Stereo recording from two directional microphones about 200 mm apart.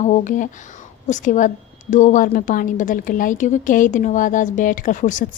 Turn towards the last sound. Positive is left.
turn(degrees=40)  # may be behind; listen again after turning